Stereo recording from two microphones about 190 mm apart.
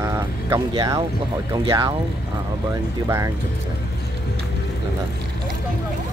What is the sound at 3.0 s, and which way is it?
Speech, 15° right (ahead or behind).